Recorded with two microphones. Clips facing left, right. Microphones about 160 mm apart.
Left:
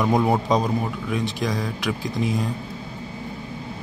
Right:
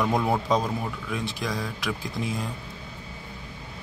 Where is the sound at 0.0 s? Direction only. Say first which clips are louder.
Left 4 dB; 20° left (ahead or behind).